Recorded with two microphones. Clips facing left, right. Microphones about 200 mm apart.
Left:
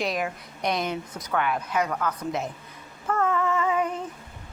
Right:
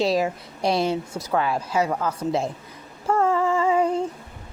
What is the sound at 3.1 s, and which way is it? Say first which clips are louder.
Female singing: right 4 dB; 30° right (ahead or behind).